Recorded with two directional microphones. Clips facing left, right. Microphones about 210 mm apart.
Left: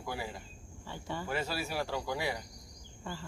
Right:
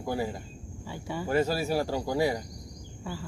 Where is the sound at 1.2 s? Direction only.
40° right (ahead or behind).